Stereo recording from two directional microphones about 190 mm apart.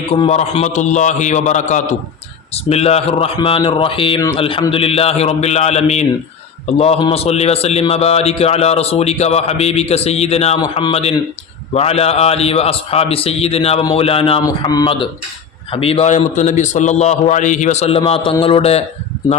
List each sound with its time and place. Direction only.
0.1 s a man's voice: 35° left (ahead or behind)